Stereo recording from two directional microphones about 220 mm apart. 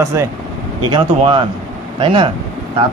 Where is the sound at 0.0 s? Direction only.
15° right (ahead or behind).